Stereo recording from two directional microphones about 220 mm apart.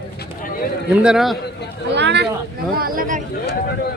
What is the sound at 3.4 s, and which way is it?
Speech, 45° left (ahead or behind).